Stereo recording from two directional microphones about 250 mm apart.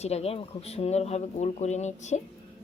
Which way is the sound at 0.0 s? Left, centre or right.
Left.